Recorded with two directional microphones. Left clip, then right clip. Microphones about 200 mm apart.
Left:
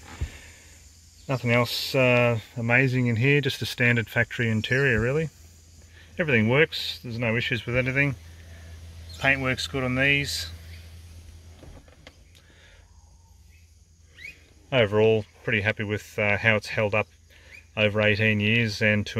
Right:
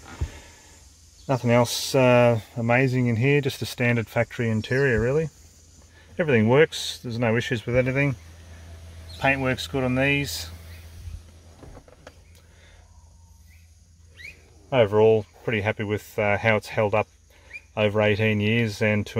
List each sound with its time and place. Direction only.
0.1 s a sound: 15° right (ahead or behind)
1.2 s speech: 15° right (ahead or behind)
9.2 s speech: 10° right (ahead or behind)
14.7 s speech: centre (ahead or behind)